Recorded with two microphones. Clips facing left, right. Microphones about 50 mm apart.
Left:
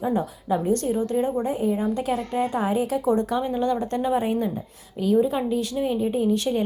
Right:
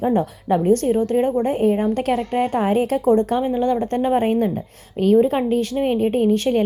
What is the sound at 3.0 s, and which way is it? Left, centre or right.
Speech, right.